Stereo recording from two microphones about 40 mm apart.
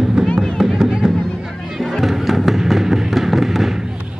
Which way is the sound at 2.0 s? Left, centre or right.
Centre.